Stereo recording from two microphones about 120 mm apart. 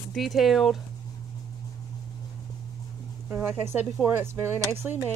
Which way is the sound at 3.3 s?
15° right (ahead or behind).